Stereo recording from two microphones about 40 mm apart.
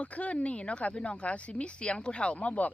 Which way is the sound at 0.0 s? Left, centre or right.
Left.